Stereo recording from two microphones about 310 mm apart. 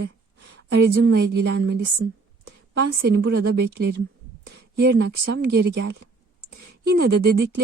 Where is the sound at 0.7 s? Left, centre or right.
Right.